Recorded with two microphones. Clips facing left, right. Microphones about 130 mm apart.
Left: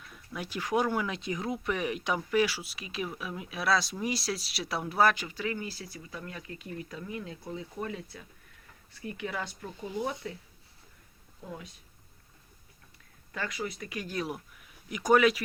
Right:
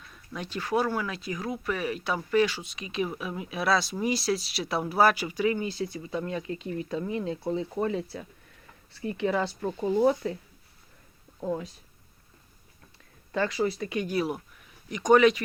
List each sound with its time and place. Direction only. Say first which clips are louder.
0.1 s speech: right 2 dB; 10° left (ahead or behind); by 9.6 s 30° right (ahead or behind)
9.6 s speech: right 10 dB; 45° right (ahead or behind)
11.3 s speech: right 12 dB; 40° right (ahead or behind)
13.3 s speech: right 9 dB; 30° right (ahead or behind)
14.1 s speech: right 6 dB; 5° right (ahead or behind)